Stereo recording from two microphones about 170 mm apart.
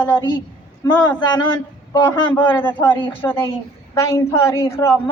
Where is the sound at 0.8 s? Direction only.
20° left (ahead or behind).